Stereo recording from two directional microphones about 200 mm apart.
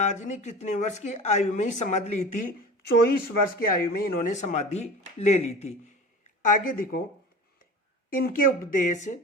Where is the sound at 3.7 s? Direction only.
50° left (ahead or behind).